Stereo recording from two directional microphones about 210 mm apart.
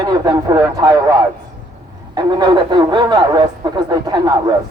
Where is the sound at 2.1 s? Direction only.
20° right (ahead or behind).